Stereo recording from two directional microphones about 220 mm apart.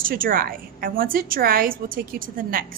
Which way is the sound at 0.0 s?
40° right (ahead or behind).